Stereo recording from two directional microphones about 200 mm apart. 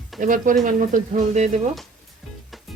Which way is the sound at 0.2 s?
40° right (ahead or behind).